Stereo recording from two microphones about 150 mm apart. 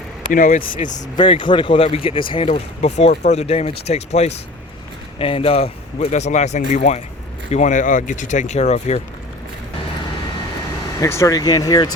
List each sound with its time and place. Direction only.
0.3 s speech: 65° left (ahead or behind)
1.1 s speech: 30° left (ahead or behind); by 9.0 s 45° left (ahead or behind)
11.0 s speech: 20° left (ahead or behind)